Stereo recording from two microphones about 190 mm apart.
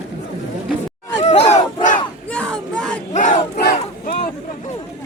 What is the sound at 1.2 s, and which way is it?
Battle cry, 35° left (ahead or behind).